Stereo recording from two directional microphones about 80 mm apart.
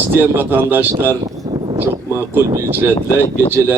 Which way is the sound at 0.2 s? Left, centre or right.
Right.